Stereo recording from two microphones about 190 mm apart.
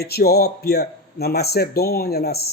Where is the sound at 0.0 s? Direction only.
55° left (ahead or behind).